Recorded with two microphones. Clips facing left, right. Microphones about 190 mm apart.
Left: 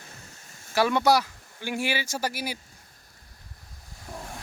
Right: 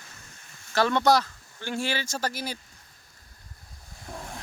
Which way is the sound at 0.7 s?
10° left (ahead or behind).